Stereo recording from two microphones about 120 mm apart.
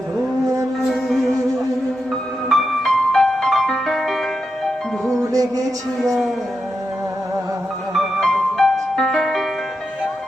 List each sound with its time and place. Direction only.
0.9 s music: centre (ahead or behind)
2.5 s music: 5° left (ahead or behind)
5.3 s music: 30° right (ahead or behind)
6.0 s music: centre (ahead or behind)
7.9 s music: 5° left (ahead or behind)